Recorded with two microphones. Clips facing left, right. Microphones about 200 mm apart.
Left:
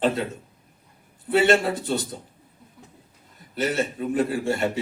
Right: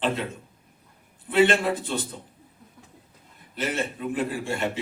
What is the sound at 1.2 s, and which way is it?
Speech, 40° left (ahead or behind).